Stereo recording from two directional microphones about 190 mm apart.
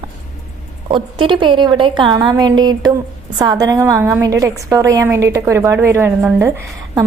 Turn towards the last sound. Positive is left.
turn(degrees=-15)  # may be behind; listen again after turning